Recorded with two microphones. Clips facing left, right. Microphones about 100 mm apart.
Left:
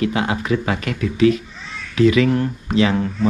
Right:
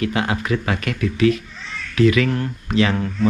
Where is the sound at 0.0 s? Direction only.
20° left (ahead or behind).